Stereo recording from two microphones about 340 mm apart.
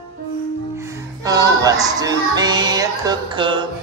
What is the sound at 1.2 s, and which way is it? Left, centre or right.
Music, centre.